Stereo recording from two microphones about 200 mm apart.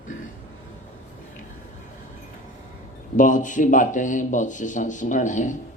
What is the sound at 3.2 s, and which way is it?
Speech, 40° left (ahead or behind).